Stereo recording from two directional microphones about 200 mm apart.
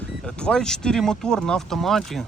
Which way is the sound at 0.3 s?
5° left (ahead or behind).